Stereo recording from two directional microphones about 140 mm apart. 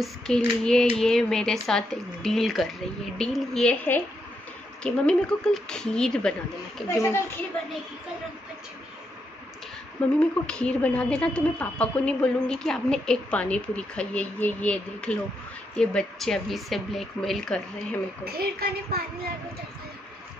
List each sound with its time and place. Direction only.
0.0 s a woman's voice: 5° left (ahead or behind)
6.9 s a woman's voice: 20° left (ahead or behind)
10.0 s a woman's voice: 10° left (ahead or behind)
18.2 s a woman's voice: 90° right